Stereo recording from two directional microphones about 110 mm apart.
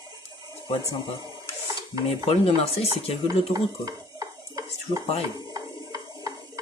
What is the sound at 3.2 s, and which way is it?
Stir, 40° right (ahead or behind).